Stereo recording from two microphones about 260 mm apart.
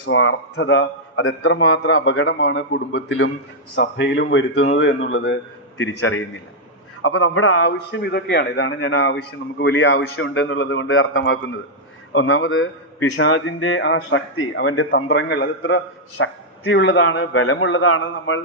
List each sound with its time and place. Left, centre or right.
0.0 s a man's voice: left